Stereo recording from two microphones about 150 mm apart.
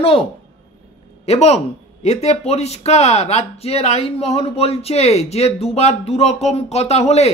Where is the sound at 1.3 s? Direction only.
45° left (ahead or behind).